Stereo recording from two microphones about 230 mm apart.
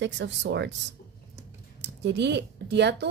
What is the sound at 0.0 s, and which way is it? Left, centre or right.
A woman's voice, right.